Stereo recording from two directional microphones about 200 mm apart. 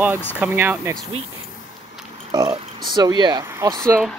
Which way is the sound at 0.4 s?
10° right (ahead or behind).